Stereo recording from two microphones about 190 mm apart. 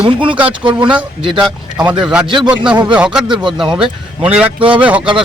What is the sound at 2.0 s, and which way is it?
Speech, 5° right (ahead or behind).